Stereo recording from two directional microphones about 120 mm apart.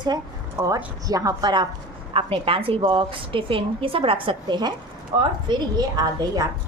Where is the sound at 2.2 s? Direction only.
50° right (ahead or behind).